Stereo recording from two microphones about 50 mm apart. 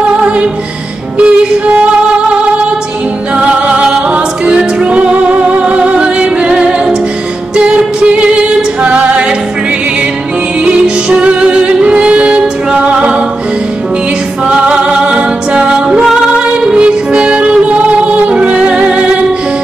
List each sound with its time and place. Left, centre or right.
1.1 s music: right
7.5 s a capella: centre
10.6 s music: right
14.4 s music: centre